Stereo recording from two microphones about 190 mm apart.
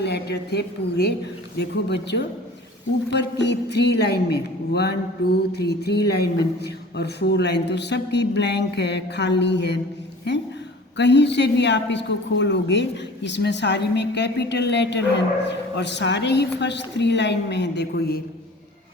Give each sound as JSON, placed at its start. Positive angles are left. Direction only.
{"t": 0.0, "sound": "a woman's voice", "side_deg": 60}